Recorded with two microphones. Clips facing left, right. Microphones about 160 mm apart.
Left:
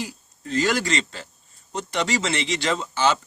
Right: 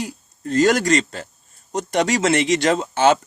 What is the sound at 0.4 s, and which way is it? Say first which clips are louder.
Speech: right 6 dB; 45° right (ahead or behind).